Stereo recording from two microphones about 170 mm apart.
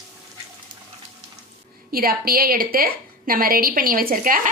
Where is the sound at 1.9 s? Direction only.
60° right (ahead or behind).